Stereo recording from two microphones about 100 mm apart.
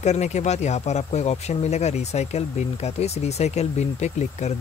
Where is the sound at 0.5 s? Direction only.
90° left.